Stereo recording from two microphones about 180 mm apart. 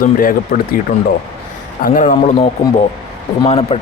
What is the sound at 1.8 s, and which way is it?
Speech, 45° left (ahead or behind).